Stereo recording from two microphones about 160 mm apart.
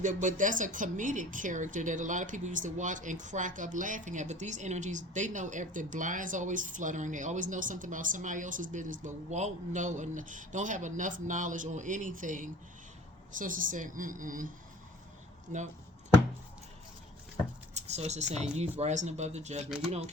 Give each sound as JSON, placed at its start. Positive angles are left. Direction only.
{"t": 0.0, "sound": "a woman's voice", "side_deg": -50}
{"t": 15.5, "sound": "chop", "side_deg": -50}
{"t": 17.7, "sound": "speech", "side_deg": -45}